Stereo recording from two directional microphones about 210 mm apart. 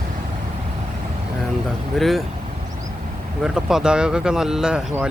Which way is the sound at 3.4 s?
Centre (ahead or behind).